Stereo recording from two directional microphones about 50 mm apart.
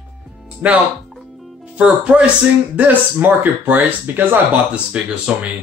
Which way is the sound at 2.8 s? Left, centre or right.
Right.